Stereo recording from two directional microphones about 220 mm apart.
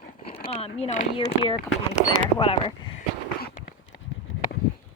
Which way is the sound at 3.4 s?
35° left (ahead or behind).